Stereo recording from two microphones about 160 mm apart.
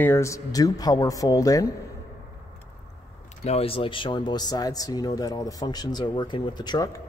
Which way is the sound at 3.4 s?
40° left (ahead or behind).